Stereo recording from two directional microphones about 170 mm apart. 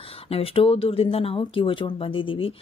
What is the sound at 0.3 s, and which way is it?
Speech, 35° left (ahead or behind).